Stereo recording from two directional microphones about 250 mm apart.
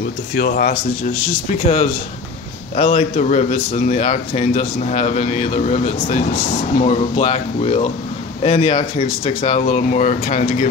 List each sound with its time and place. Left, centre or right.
0.3 s speech: left
2.7 s a man's voice: left